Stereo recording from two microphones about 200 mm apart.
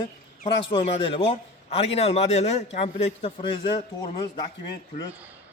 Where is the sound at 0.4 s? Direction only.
25° left (ahead or behind).